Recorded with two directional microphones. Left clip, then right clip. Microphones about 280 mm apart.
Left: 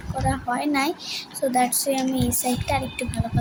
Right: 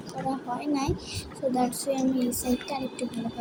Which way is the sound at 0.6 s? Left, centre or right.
Left.